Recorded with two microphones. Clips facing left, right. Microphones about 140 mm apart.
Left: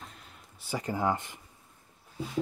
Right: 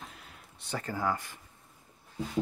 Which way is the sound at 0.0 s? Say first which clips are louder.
Right 1 dB; centre (ahead or behind).